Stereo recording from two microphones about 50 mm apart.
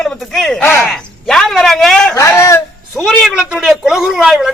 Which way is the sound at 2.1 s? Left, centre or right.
Left.